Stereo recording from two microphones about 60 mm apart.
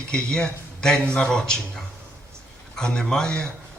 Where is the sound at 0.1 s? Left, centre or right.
Centre.